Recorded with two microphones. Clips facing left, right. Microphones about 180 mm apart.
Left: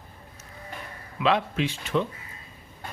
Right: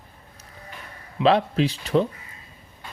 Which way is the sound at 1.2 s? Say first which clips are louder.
Right 5 dB; 35° right (ahead or behind).